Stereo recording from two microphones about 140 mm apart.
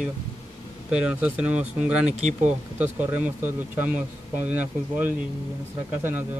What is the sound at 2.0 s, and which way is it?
Speech, 55° right (ahead or behind).